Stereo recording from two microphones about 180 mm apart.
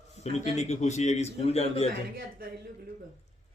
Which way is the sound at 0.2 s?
35° left (ahead or behind).